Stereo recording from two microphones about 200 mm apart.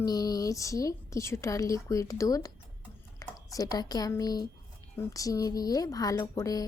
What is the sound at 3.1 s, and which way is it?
A woman's voice, 20° left (ahead or behind).